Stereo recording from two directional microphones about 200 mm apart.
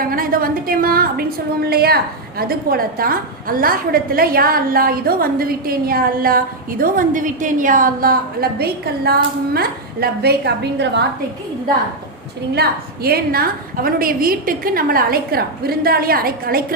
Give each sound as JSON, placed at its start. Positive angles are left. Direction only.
{"t": 0.0, "sound": "a woman's voice", "side_deg": -45}
{"t": 12.5, "sound": "a woman's voice", "side_deg": -50}